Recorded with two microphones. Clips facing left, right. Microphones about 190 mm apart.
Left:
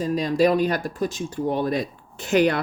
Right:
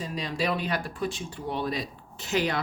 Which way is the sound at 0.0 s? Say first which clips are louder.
Left 10 dB; 45° left (ahead or behind).